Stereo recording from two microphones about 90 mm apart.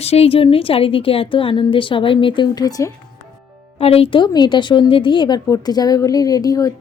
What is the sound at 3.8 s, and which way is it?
A woman's voice, 90° left.